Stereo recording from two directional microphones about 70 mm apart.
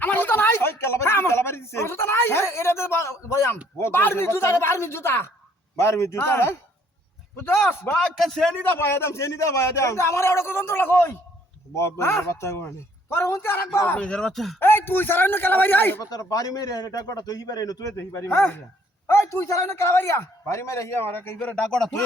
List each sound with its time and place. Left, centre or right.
0.0 s speech: left
7.9 s a man's voice: centre
8.6 s speech: left
13.8 s speech: centre
14.6 s speech: left
16.0 s a man's voice: left
17.9 s a man's voice: left
21.3 s speech: centre